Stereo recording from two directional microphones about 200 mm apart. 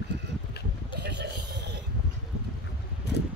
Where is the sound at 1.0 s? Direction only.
55° right (ahead or behind).